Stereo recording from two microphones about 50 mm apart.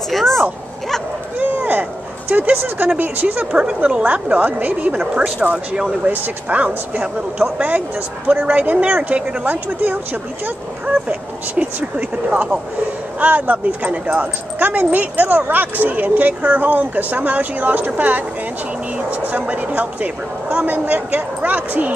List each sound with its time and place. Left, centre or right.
0.1 s speech: centre
1.4 s a sound: right
3.0 s speech: right
3.5 s speech: right
5.0 s speech: centre
6.0 s speech: right
12.3 s speech: right